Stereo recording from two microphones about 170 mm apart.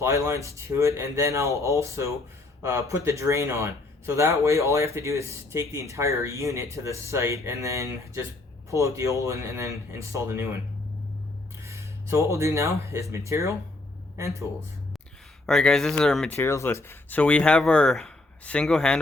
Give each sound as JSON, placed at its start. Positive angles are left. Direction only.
{"t": 0.0, "sound": "speech", "side_deg": -15}
{"t": 11.6, "sound": "speech", "side_deg": -15}
{"t": 15.4, "sound": "speech", "side_deg": 5}